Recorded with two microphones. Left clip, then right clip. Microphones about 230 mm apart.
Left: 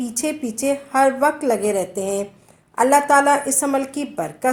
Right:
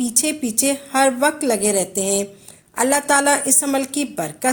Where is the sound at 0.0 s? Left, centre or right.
Right.